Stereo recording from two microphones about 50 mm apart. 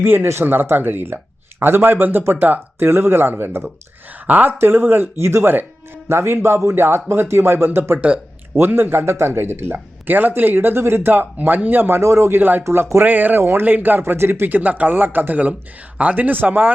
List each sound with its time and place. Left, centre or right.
0.0 s a man's voice: right
2.7 s a man's voice: right
4.3 s a man's voice: right
5.2 s a man's voice: right
7.9 s speech: right
8.5 s a man's voice: right
12.0 s speech: right
12.4 s speech: right
12.6 s speech: right
13.0 s speech: right
13.4 s a man's voice: right
13.7 s speech: right
14.1 s speech: right